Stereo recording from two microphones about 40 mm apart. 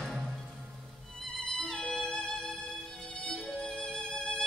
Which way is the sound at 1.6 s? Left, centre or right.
Centre.